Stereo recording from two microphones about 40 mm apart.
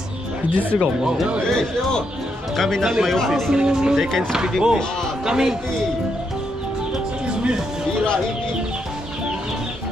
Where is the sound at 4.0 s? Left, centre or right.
Centre.